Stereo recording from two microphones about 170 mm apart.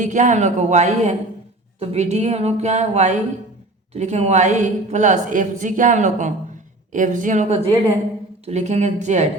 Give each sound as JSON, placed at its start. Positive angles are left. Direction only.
{"t": 0.0, "sound": "a woman's voice", "side_deg": -45}